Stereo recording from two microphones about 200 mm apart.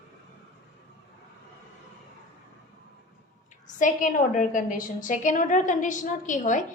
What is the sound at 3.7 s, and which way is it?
A woman's voice, 40° left (ahead or behind).